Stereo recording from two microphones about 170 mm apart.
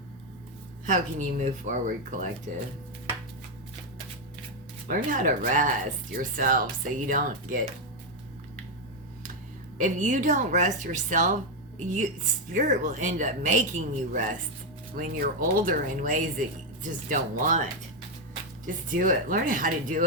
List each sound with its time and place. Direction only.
0.9 s speech: 50° right (ahead or behind)
4.9 s speech: 50° right (ahead or behind)
9.7 s speech: 50° right (ahead or behind)